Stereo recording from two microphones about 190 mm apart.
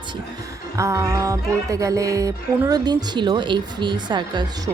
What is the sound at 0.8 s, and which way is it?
Speech, 15° right (ahead or behind).